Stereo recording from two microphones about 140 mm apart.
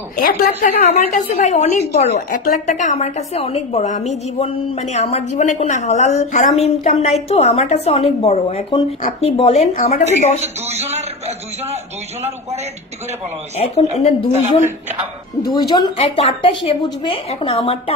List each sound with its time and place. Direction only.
0.2 s a woman's voice: 85° left; by 10.4 s 55° left (ahead or behind)
10.4 s a man's voice: 50° right (ahead or behind)
13.6 s a woman's voice: 50° left (ahead or behind)
15.4 s a woman's voice: 30° left (ahead or behind)
16.0 s a woman's voice: 45° left (ahead or behind)